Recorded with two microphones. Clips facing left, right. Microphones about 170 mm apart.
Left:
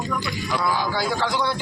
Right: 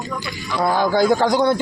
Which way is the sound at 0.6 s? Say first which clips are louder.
Right 9 dB; 55° right (ahead or behind).